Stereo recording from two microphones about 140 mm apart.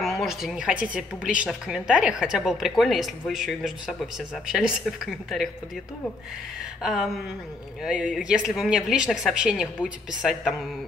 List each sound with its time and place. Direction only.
0.0 s speech: centre (ahead or behind)
6.8 s speech: 5° right (ahead or behind)